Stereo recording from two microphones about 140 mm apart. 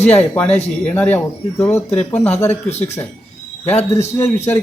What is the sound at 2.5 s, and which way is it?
Speech, 50° left (ahead or behind).